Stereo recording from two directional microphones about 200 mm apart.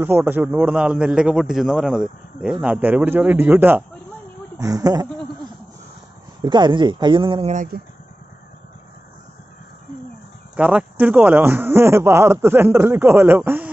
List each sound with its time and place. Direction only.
0.0 s a man's voice: 10° right (ahead or behind)
6.4 s speech: 20° right (ahead or behind)
7.5 s speech: 45° right (ahead or behind)
10.5 s speech: 5° right (ahead or behind)